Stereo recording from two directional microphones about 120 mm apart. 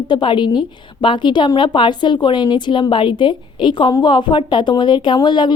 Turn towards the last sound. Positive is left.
turn(degrees=40)  # may be behind; listen again after turning